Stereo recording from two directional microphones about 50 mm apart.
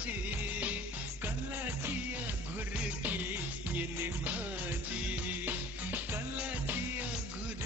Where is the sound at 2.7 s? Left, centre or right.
Right.